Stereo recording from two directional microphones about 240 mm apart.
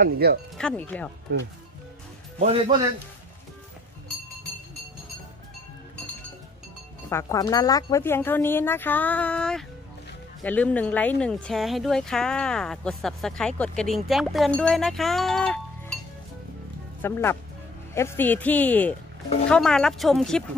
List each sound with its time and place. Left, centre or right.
0.0 s speech: right
0.6 s speech: centre
2.3 s a man's voice: right
7.1 s speech: centre
17.0 s speech: centre